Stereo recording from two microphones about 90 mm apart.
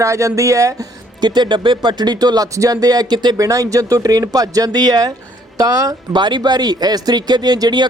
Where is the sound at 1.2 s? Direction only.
55° right (ahead or behind).